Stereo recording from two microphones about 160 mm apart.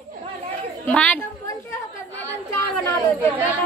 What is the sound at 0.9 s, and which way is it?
Speech, 10° left (ahead or behind).